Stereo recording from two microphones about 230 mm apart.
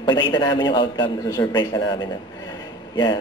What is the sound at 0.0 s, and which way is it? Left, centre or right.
A man's voice, centre.